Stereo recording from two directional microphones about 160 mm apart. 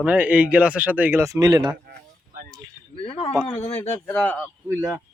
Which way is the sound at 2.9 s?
35° left (ahead or behind).